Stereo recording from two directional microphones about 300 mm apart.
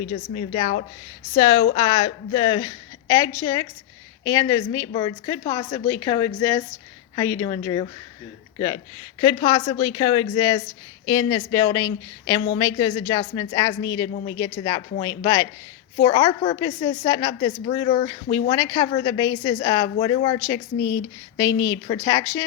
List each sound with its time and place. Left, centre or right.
0.1 s a woman's voice: left
20.7 s speech: left
21.6 s a woman's voice: centre